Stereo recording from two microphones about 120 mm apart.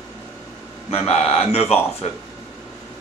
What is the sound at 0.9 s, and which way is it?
Speech, 60° left (ahead or behind).